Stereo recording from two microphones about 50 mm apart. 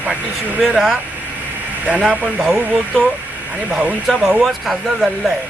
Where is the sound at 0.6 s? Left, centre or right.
Centre.